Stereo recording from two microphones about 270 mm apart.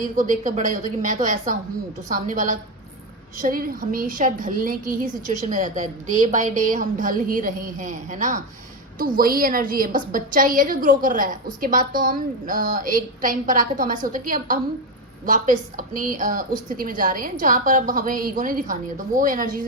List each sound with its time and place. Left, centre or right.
0.2 s a woman's voice: right